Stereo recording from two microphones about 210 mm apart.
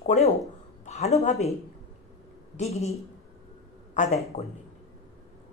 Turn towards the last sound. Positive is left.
turn(degrees=30)  # may be behind; listen again after turning